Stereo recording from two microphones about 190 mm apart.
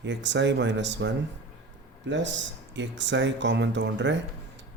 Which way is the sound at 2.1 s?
70° right (ahead or behind).